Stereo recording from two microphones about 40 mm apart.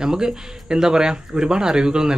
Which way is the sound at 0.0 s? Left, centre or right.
Centre.